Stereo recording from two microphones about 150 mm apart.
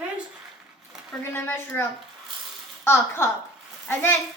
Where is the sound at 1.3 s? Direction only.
15° left (ahead or behind).